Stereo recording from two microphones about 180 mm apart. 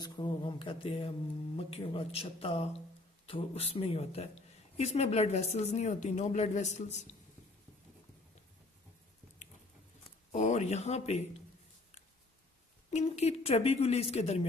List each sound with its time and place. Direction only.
0.0 s a sound: 25° left (ahead or behind)
1.6 s speech: 30° left (ahead or behind)
10.3 s speech: 40° left (ahead or behind)
12.9 s speech: 35° left (ahead or behind)